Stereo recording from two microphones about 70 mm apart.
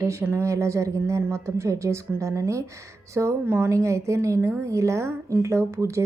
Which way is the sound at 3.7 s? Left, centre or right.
Right.